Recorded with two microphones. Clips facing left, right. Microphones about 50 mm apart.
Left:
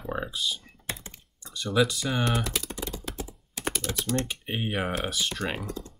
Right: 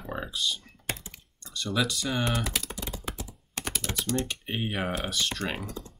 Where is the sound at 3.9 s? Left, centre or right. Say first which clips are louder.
Left 1 dB; right.